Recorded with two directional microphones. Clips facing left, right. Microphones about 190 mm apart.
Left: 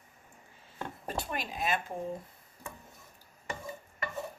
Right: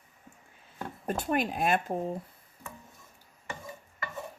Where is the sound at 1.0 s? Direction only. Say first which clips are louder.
Right 9 dB; 50° right (ahead or behind).